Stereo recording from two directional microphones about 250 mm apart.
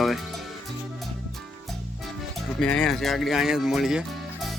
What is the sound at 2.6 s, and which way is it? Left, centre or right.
Speech, centre.